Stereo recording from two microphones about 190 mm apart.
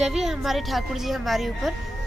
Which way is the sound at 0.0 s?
Centre (ahead or behind).